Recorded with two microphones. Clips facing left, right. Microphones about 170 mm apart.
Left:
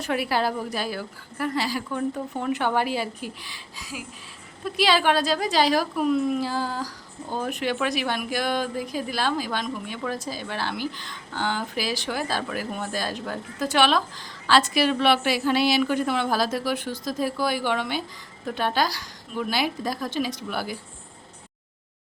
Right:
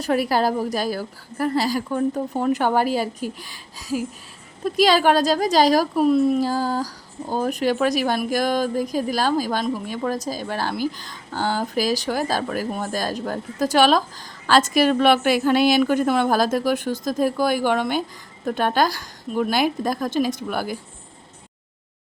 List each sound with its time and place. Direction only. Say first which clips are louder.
0.0 s a woman's voice: right 5 dB; 40° right (ahead or behind)